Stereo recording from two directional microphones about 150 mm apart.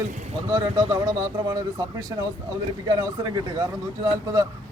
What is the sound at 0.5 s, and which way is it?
A man's voice, 30° right (ahead or behind).